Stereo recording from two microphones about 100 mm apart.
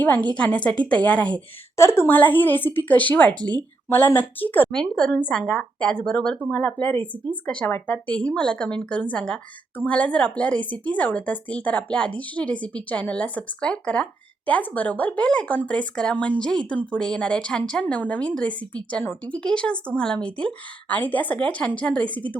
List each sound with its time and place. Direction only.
0.0 s a woman's voice: 20° left (ahead or behind)
1.7 s speech: 25° left (ahead or behind)
4.7 s speech: 5° left (ahead or behind)